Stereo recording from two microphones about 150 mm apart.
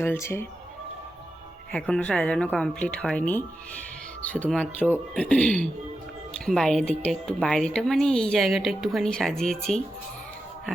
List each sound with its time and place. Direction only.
0.0 s speech: 15° left (ahead or behind)
1.7 s speech: 5° left (ahead or behind)